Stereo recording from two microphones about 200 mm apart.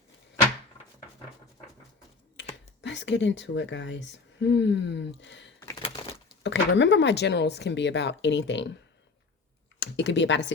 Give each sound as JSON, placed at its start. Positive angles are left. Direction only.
{"t": 2.8, "sound": "a woman's voice", "side_deg": 60}
{"t": 6.0, "sound": "a sound", "side_deg": 30}
{"t": 6.4, "sound": "a woman's voice", "side_deg": 60}
{"t": 9.8, "sound": "speech", "side_deg": 60}